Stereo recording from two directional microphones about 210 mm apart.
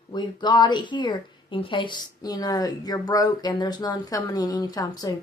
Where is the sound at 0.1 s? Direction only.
20° left (ahead or behind).